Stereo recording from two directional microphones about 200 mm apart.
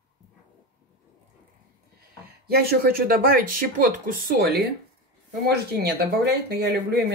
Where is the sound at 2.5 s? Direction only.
50° right (ahead or behind).